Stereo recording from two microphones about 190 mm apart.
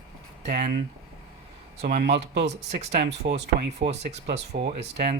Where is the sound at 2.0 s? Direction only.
60° right (ahead or behind).